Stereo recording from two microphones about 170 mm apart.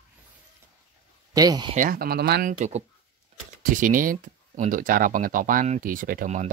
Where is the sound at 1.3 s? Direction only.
25° right (ahead or behind).